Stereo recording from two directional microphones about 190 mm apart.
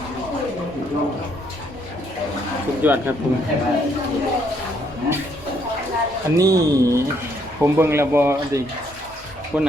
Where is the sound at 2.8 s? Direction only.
10° right (ahead or behind).